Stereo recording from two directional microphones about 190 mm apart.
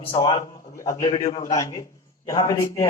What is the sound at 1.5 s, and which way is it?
A man's voice, 20° left (ahead or behind).